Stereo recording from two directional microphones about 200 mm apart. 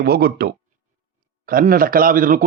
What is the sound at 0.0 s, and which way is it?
A man's voice, 50° right (ahead or behind).